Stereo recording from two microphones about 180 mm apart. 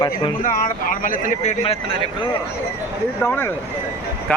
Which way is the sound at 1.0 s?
45° left (ahead or behind).